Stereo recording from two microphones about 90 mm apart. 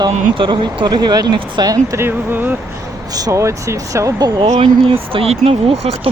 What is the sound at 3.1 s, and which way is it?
Speech, 40° right (ahead or behind).